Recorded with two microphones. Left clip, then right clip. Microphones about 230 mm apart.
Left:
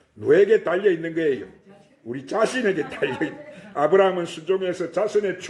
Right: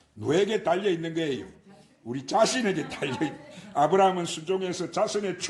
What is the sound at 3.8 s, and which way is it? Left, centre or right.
A man's voice, right.